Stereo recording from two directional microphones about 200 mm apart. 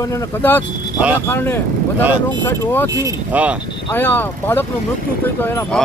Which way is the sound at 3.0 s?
10° right (ahead or behind).